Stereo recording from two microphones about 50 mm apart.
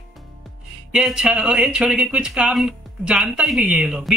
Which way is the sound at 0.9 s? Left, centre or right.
Centre.